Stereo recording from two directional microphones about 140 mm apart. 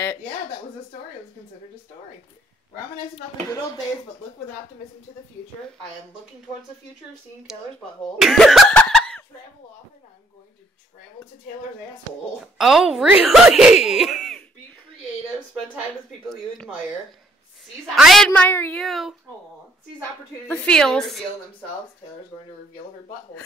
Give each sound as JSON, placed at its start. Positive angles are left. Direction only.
{"t": 3.4, "sound": "speech", "side_deg": 25}
{"t": 8.2, "sound": "speech", "side_deg": 0}
{"t": 12.5, "sound": "speech", "side_deg": 0}
{"t": 17.9, "sound": "speech", "side_deg": 0}
{"t": 20.4, "sound": "a woman's voice", "side_deg": 10}